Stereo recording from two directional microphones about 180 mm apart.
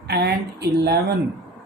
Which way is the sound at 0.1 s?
65° right (ahead or behind).